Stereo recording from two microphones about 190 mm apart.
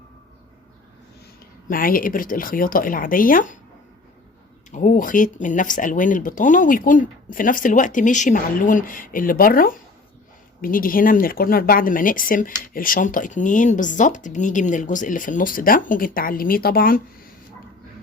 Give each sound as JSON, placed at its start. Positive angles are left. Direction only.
{"t": 1.6, "sound": "speech", "side_deg": 50}
{"t": 4.7, "sound": "speech", "side_deg": 45}